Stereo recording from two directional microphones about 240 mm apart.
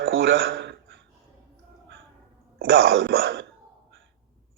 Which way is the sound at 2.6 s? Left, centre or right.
Right.